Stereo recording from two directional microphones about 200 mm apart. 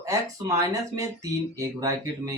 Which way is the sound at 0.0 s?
15° right (ahead or behind).